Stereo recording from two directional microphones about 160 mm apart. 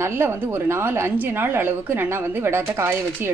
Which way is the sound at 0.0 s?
15° right (ahead or behind).